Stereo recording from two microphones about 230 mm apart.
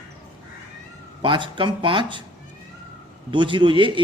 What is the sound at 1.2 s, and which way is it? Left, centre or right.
Speech, right.